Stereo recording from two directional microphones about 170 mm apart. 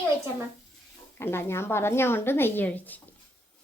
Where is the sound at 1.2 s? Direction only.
15° left (ahead or behind).